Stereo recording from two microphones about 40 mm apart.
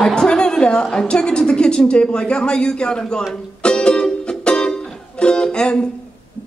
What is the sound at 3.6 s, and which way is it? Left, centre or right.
Music, left.